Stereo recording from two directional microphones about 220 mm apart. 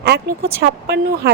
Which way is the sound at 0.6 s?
50° right (ahead or behind).